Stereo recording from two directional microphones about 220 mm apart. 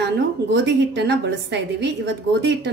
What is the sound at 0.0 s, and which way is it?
Speech, 50° right (ahead or behind).